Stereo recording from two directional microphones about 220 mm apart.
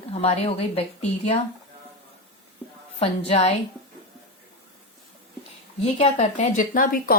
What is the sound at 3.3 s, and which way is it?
Speech, 25° left (ahead or behind).